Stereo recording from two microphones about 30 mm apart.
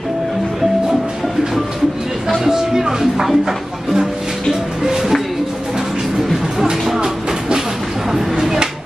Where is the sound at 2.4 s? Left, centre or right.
Centre.